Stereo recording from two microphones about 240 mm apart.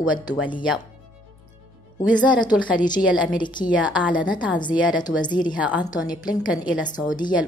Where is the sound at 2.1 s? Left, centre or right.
Centre.